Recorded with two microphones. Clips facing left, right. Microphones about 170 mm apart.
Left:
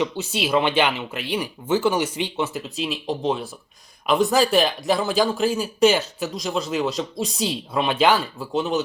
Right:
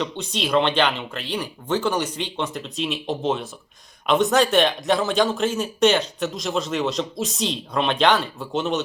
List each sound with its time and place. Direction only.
0.0 s speech: 5° left (ahead or behind)